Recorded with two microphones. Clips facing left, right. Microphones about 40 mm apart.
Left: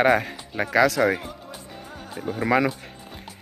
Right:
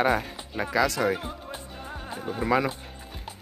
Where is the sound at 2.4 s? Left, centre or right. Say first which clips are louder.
Left 3 dB; left.